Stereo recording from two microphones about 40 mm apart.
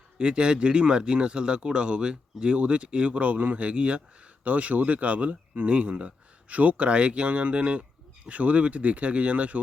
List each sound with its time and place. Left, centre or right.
0.2 s speech: right